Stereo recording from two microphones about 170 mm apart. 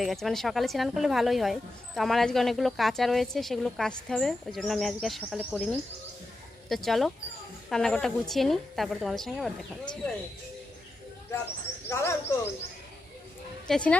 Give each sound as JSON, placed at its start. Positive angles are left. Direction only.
{"t": 0.0, "sound": "speech", "side_deg": 0}
{"t": 6.7, "sound": "speech", "side_deg": 0}
{"t": 11.9, "sound": "bird", "side_deg": 15}
{"t": 13.7, "sound": "speech", "side_deg": 5}